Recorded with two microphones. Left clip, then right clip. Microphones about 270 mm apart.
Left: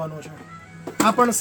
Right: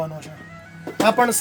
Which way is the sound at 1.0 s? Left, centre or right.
Right.